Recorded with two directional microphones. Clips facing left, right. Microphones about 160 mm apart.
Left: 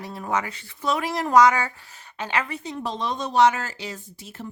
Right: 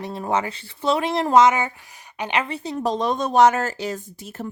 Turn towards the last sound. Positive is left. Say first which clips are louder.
# right 5 dB
turn(degrees=-50)  # may be behind; listen again after turning